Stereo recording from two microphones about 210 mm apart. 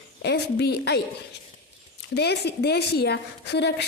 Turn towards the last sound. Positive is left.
turn(degrees=50)  # may be behind; listen again after turning